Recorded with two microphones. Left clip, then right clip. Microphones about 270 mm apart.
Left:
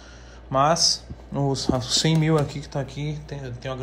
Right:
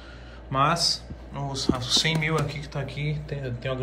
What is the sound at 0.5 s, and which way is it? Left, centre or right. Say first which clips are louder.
Speech: left 3 dB; centre.